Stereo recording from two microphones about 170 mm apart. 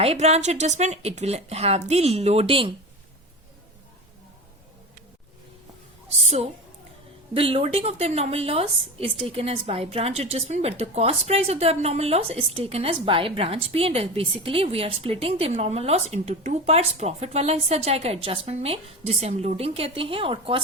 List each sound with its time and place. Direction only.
0.0 s a woman's voice: 40° right (ahead or behind)
6.1 s a woman's voice: 40° right (ahead or behind)